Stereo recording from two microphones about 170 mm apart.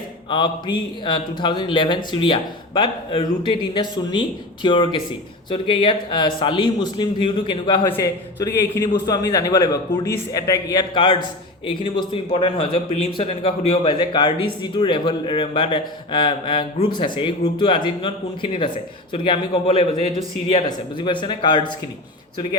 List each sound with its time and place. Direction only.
0.3 s a man's voice: 25° left (ahead or behind)